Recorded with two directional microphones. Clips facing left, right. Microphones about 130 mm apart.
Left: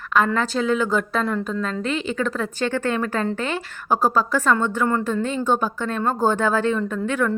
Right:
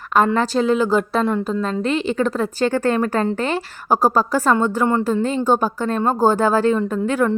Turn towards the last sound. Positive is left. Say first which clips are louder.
# right 4 dB
turn(degrees=-35)  # may be behind; listen again after turning